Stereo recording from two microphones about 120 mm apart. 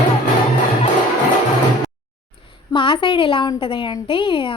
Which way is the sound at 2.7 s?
45° left (ahead or behind).